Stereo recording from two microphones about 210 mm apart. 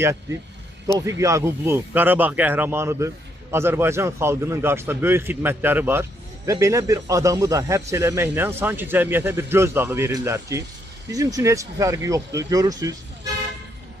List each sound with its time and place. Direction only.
0.9 s a man's voice: 15° right (ahead or behind)